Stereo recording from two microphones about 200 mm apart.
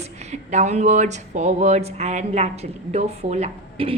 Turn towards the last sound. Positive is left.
turn(degrees=-30)  # may be behind; listen again after turning